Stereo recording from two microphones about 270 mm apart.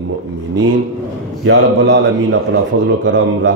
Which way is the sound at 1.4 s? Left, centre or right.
Right.